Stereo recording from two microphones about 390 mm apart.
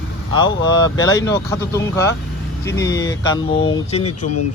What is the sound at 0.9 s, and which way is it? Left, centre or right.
Speech, left.